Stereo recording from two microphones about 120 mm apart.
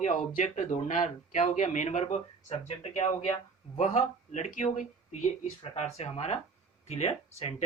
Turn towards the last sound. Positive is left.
turn(degrees=60)  # may be behind; listen again after turning